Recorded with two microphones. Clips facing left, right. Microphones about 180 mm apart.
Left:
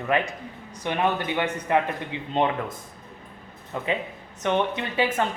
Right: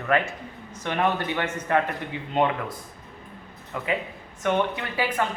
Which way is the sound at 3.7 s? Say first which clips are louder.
Left 1 dB; 25° left (ahead or behind).